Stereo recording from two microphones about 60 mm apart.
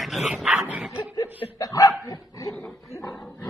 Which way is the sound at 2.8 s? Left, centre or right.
Left.